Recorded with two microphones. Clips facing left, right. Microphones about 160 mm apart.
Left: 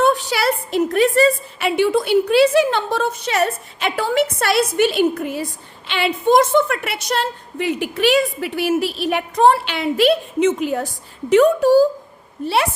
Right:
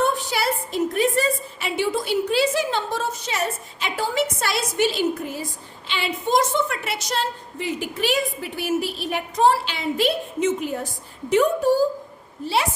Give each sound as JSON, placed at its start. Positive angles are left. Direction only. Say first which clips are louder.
{"t": 0.0, "sound": "a woman's voice", "louder": "left 5 dB", "side_deg": 80}